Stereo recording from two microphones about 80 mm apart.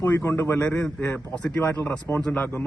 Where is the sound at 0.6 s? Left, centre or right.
Centre.